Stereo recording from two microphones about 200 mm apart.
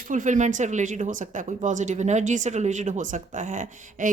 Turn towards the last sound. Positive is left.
turn(degrees=-40)  # may be behind; listen again after turning